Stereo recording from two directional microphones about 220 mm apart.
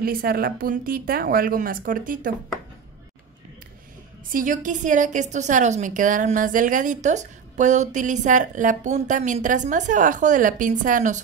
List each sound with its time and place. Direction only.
0.0 s a woman's voice: 40° right (ahead or behind)
4.3 s a woman's voice: 40° right (ahead or behind)